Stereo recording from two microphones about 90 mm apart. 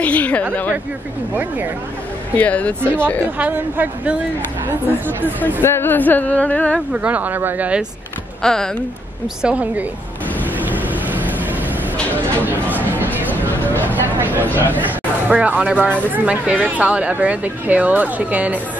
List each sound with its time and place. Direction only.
0.0 s speech: 15° left (ahead or behind)
2.3 s speech: 15° left (ahead or behind)
3.3 s speech: 15° right (ahead or behind)
5.6 s speech: 25° left (ahead or behind)
6.9 s speech: 15° right (ahead or behind)
8.4 s speech: 5° left (ahead or behind)
9.4 s speech: 15° right (ahead or behind)
11.1 s vehicle: 20° right (ahead or behind)
13.6 s vehicle: 20° left (ahead or behind)
14.0 s a sound: 20° right (ahead or behind)
14.5 s speech: 20° right (ahead or behind)